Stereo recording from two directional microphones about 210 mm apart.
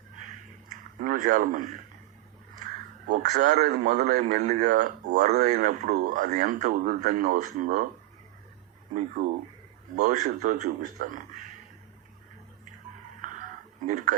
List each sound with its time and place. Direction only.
0.9 s speech: 40° right (ahead or behind)
3.1 s speech: 35° right (ahead or behind)
9.9 s speech: 35° right (ahead or behind)
13.8 s speech: 40° right (ahead or behind)